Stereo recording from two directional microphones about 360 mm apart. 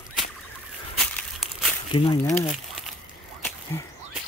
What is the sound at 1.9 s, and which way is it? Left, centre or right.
Speech, centre.